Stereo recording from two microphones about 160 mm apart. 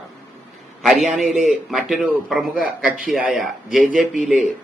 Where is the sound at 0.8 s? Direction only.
Centre (ahead or behind).